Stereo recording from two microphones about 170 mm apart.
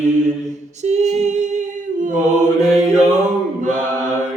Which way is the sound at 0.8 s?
40° right (ahead or behind).